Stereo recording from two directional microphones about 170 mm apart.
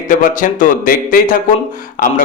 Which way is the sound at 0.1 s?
50° left (ahead or behind).